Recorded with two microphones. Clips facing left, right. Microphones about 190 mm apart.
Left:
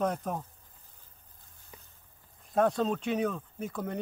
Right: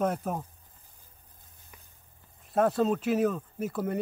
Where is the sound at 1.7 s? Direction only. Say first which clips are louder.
Left 4 dB; 30° left (ahead or behind).